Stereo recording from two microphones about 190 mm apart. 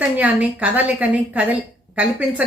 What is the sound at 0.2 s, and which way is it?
Speech, 10° right (ahead or behind).